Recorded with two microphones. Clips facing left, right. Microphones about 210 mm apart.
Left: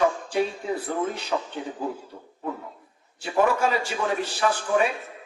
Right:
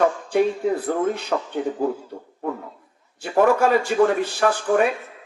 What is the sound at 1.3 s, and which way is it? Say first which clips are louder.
Speech: right 3 dB; 55° right (ahead or behind).